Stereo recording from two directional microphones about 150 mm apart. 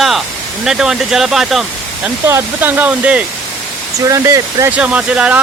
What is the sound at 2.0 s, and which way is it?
Speech, 15° right (ahead or behind).